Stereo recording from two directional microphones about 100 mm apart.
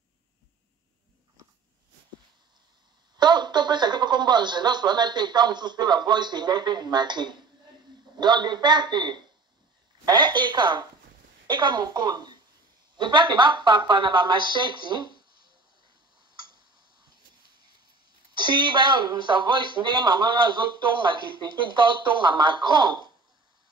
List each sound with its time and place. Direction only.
3.2 s speech: 45° right (ahead or behind)
18.3 s speech: 50° right (ahead or behind)